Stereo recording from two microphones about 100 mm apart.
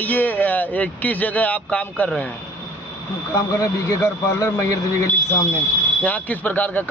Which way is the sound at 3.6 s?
30° left (ahead or behind).